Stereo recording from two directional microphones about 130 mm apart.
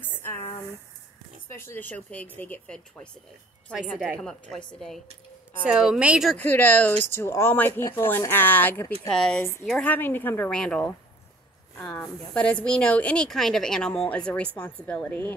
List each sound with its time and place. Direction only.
1.5 s a woman's voice: 20° left (ahead or behind); by 6.3 s 5° right (ahead or behind)
6.3 s speech: 15° left (ahead or behind)
9.1 s a woman's voice: 5° left (ahead or behind)